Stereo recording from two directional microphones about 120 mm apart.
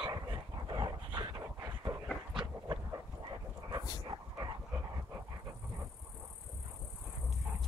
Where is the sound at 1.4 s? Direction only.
25° right (ahead or behind).